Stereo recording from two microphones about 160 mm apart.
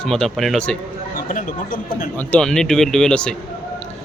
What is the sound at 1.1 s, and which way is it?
Speech, 55° left (ahead or behind).